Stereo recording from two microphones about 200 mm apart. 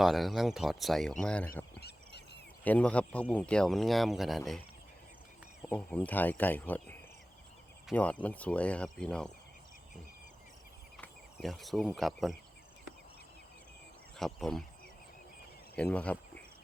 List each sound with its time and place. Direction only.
0.0 s speech: centre (ahead or behind)
1.7 s a sound: 55° left (ahead or behind)
2.6 s speech: 5° left (ahead or behind)
5.6 s speech: 5° left (ahead or behind)
10.9 s speech: centre (ahead or behind)
14.2 s speech: centre (ahead or behind)
15.7 s speech: 5° left (ahead or behind)